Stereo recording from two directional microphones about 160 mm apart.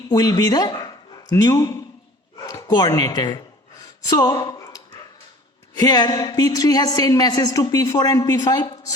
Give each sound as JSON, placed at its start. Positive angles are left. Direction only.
{"t": 0.1, "sound": "speech", "side_deg": 25}
{"t": 2.5, "sound": "a sound", "side_deg": 20}
{"t": 5.7, "sound": "a woman's voice", "side_deg": 25}